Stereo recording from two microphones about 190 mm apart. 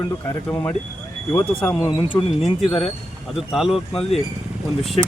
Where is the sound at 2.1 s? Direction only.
30° left (ahead or behind).